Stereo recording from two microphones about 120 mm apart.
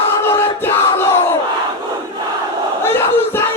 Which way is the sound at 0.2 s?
20° left (ahead or behind).